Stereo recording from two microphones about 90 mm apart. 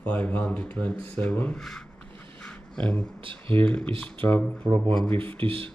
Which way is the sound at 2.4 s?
10° left (ahead or behind).